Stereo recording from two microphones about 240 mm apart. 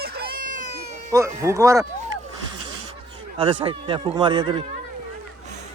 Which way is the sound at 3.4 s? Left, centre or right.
Right.